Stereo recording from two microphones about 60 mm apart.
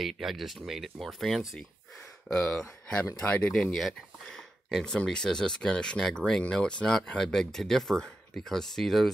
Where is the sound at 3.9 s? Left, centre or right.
Centre.